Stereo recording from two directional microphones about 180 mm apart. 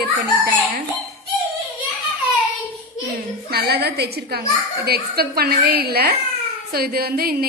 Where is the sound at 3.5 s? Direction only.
60° right (ahead or behind).